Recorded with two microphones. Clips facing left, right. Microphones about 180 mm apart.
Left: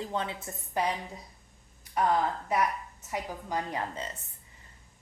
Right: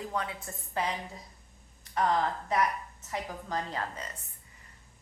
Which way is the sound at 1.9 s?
10° left (ahead or behind).